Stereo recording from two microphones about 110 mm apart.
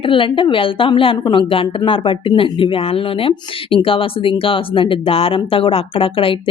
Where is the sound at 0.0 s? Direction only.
50° left (ahead or behind).